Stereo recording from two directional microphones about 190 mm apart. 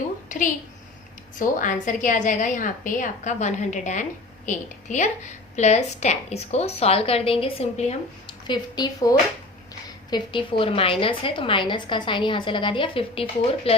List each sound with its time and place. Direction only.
0.3 s a woman's voice: 40° left (ahead or behind)